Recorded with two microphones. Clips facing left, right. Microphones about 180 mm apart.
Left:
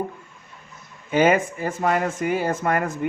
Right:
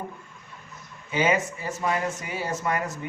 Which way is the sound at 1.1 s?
55° left (ahead or behind).